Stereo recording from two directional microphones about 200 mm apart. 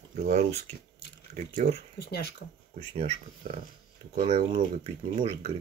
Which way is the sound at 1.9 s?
55° left (ahead or behind).